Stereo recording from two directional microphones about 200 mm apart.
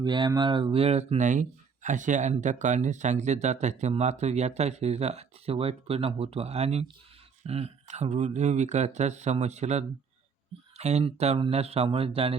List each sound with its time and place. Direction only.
0.0 s speech: 20° right (ahead or behind)